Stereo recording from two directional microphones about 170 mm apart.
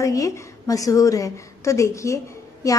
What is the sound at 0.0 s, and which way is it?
A woman's voice, 20° left (ahead or behind).